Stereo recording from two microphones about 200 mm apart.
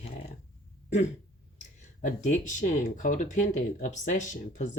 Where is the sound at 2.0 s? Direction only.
40° left (ahead or behind).